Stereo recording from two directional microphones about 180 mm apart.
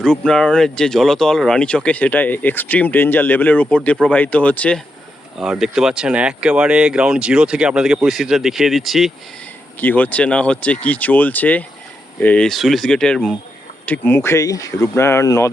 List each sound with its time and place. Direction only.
0.0 s speech: 5° left (ahead or behind)